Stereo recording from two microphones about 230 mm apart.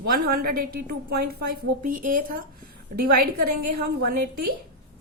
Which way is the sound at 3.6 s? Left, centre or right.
Right.